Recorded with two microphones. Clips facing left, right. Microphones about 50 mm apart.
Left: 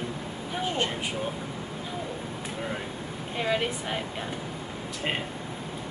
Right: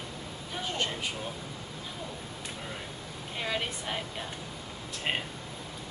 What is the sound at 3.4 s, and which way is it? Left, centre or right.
Speech, centre.